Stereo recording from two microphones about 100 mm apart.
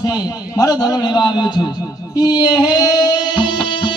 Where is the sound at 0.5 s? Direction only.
40° left (ahead or behind).